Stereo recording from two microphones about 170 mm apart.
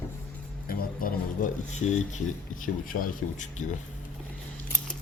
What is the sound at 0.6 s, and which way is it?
Speech, 60° left (ahead or behind).